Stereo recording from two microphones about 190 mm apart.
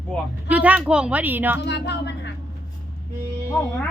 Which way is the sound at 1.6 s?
65° left (ahead or behind).